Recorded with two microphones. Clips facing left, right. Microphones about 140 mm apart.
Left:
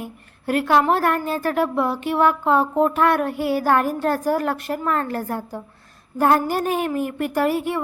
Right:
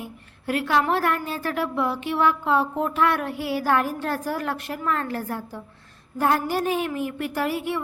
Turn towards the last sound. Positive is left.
turn(degrees=45)  # may be behind; listen again after turning